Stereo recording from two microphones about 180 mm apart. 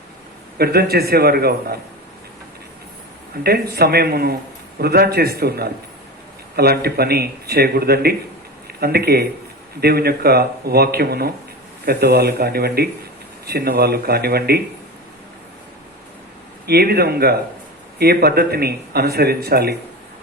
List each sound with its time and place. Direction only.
0.6 s speech: 60° right (ahead or behind)
3.4 s speech: 60° right (ahead or behind)
16.6 s speech: 60° right (ahead or behind)